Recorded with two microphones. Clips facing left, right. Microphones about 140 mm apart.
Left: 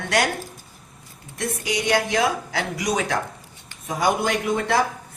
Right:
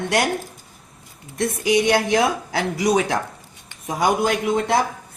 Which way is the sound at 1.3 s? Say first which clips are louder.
Right 7 dB; 25° right (ahead or behind).